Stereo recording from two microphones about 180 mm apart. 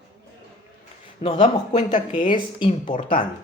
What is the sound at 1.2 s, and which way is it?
A woman's voice, 40° left (ahead or behind).